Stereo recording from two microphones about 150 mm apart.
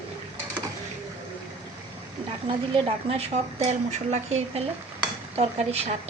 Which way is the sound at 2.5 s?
35° right (ahead or behind).